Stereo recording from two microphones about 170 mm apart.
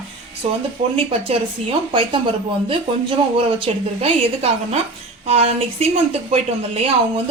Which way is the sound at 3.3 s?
35° right (ahead or behind).